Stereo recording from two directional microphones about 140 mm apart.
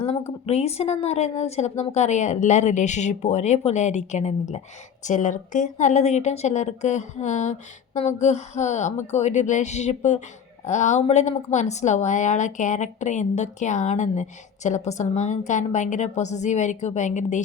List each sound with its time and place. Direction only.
0.4 s speech: 50° left (ahead or behind)